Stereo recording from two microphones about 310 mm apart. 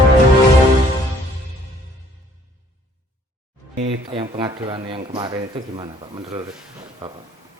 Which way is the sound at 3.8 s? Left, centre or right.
Centre.